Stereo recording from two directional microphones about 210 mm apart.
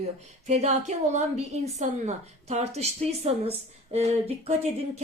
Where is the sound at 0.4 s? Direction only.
30° right (ahead or behind).